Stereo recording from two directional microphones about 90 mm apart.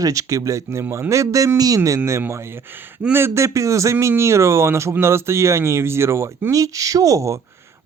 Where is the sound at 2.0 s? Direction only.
30° right (ahead or behind).